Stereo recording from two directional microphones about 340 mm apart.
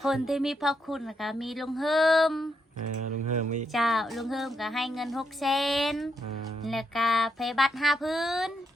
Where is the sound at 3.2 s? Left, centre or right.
Right.